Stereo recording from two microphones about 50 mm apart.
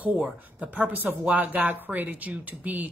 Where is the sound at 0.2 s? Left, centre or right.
Right.